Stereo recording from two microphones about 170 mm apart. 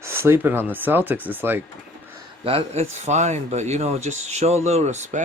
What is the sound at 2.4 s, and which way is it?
Speech, 35° right (ahead or behind).